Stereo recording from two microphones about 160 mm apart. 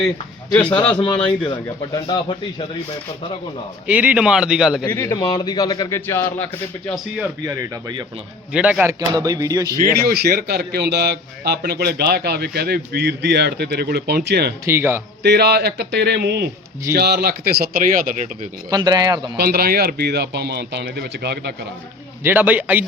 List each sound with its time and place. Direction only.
0.5 s a man's voice: 10° left (ahead or behind)
1.5 s a man's voice: 30° left (ahead or behind)
3.8 s a man's voice: 10° right (ahead or behind)
4.9 s a man's voice: 20° left (ahead or behind)
7.4 s speech: 20° right (ahead or behind)
8.5 s speech: 5° right (ahead or behind)
10.0 s a man's voice: 75° right (ahead or behind)
14.6 s a man's voice: 15° right (ahead or behind)
15.2 s a man's voice: 90° right; by 18.3 s 55° right (ahead or behind)
18.7 s speech: 25° right (ahead or behind)
19.4 s a man's voice: 70° right (ahead or behind); by 21.5 s 90° right
22.2 s a man's voice: 10° right (ahead or behind)